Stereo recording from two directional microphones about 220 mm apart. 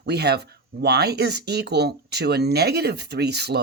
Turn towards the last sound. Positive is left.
turn(degrees=-50)  # may be behind; listen again after turning